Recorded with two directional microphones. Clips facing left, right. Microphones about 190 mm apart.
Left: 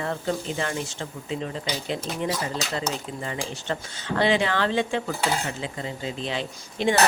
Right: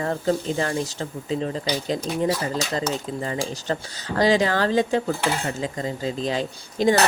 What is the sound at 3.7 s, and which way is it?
Dishes, 35° right (ahead or behind).